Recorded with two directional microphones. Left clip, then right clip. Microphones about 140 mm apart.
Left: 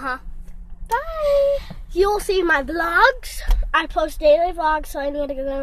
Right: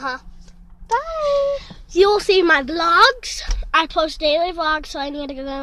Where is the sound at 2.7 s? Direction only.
5° right (ahead or behind).